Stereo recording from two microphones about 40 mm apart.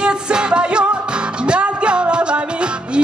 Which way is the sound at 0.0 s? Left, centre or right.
Right.